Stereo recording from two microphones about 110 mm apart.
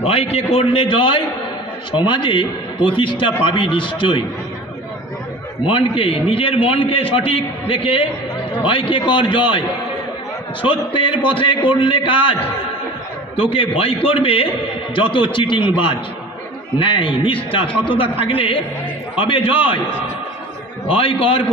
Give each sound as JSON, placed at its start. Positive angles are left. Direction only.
{"t": 0.0, "sound": "a man's voice", "side_deg": 65}
{"t": 5.7, "sound": "a man's voice", "side_deg": 55}
{"t": 10.6, "sound": "a man's voice", "side_deg": 50}
{"t": 15.0, "sound": "a man's voice", "side_deg": 50}
{"t": 16.8, "sound": "a man's voice", "side_deg": 50}
{"t": 20.9, "sound": "a man's voice", "side_deg": 60}